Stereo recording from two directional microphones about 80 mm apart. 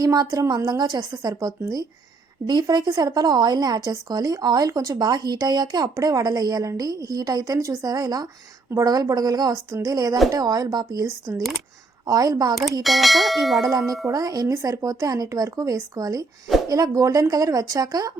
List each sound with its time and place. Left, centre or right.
0.0 s speech: right
2.5 s speech: right
11.0 s speech: right
12.0 s speech: right
12.8 s bell: centre
13.6 s speech: right